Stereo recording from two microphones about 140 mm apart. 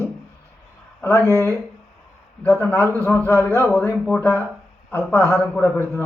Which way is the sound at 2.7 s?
20° right (ahead or behind).